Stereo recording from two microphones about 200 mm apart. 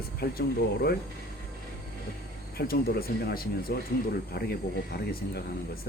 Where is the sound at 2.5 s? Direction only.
50° left (ahead or behind).